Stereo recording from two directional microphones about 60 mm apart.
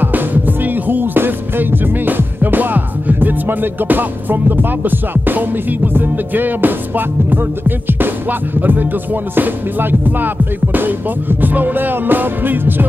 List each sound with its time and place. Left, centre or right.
0.0 s music: right